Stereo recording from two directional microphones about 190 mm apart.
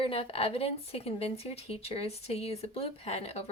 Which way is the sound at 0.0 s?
30° left (ahead or behind).